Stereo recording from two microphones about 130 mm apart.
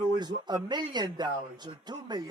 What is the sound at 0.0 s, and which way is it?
Speech, 35° right (ahead or behind).